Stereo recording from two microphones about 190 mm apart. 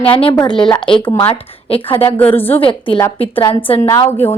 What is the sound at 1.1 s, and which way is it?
Speech, 10° left (ahead or behind).